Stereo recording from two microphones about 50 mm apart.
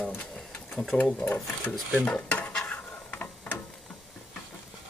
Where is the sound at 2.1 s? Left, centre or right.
Left.